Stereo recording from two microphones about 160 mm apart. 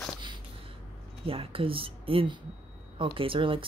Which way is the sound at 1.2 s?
35° right (ahead or behind).